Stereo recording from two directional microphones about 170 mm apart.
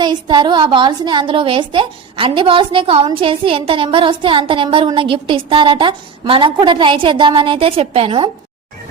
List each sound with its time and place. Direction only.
0.0 s a woman's voice: 25° right (ahead or behind)